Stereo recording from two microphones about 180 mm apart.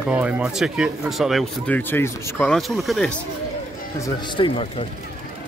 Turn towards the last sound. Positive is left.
turn(degrees=30)  # may be behind; listen again after turning